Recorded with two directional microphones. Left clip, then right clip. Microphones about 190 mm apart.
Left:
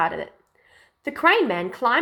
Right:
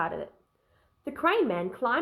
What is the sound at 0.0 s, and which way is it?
Speech, 25° left (ahead or behind).